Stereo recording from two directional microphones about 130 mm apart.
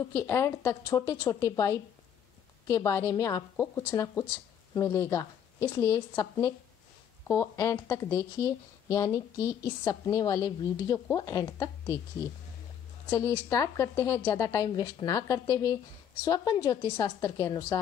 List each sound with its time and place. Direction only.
0.1 s a woman's voice: 20° left (ahead or behind)
13.1 s a woman's voice: 25° left (ahead or behind)